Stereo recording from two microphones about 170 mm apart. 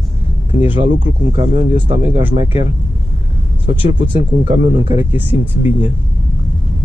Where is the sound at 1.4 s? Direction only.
35° right (ahead or behind).